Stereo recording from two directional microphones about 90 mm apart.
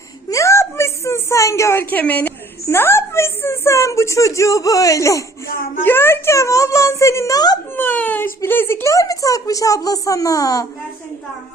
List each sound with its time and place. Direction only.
0.3 s a woman's voice: 35° left (ahead or behind)
5.8 s speech: 25° left (ahead or behind); by 7.6 s 45° left (ahead or behind)
7.8 s speech: 20° left (ahead or behind); by 10.7 s 40° left (ahead or behind)